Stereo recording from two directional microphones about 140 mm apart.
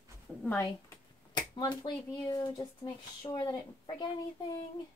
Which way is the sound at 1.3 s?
30° left (ahead or behind).